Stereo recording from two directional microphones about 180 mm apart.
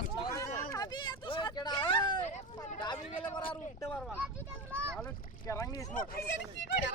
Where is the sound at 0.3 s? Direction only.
15° left (ahead or behind).